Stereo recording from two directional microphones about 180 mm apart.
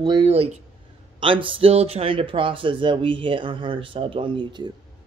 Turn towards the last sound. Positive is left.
turn(degrees=-25)  # may be behind; listen again after turning